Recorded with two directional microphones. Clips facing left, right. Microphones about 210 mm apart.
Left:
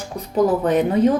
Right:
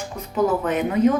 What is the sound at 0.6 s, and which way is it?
Speech, 35° left (ahead or behind).